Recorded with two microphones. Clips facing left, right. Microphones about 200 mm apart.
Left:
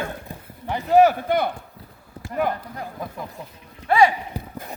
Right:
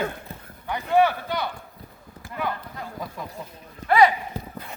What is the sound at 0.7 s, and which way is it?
Speech, 30° left (ahead or behind).